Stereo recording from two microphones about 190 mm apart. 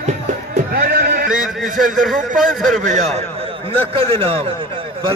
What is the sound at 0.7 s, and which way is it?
Bleat, 55° right (ahead or behind).